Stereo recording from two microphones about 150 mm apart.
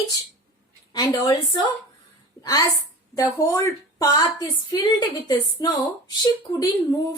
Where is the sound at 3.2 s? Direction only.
20° left (ahead or behind).